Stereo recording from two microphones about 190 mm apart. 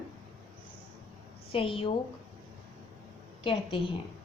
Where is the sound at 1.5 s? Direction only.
30° left (ahead or behind).